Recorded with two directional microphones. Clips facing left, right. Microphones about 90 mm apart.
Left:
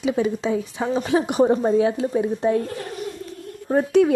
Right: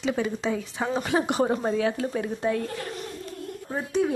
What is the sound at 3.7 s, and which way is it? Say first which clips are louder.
Speech: left 9 dB; 65° left (ahead or behind).